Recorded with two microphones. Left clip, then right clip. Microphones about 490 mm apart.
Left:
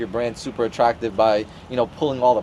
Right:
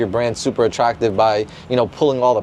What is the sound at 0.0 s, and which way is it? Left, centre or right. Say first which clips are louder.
Speech: right 6 dB; right.